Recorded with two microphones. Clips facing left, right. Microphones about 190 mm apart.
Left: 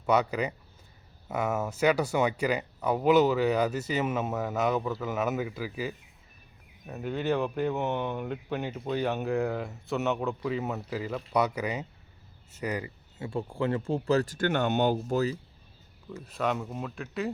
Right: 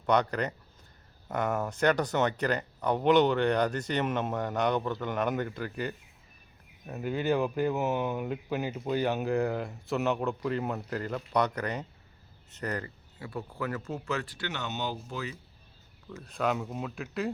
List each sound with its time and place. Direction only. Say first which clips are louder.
0.0 s speech: left 1 dB; 5° left (ahead or behind)
13.1 s speech: left 5 dB; 25° left (ahead or behind); by 15.2 s 55° left (ahead or behind)
16.0 s speech: even; 5° left (ahead or behind)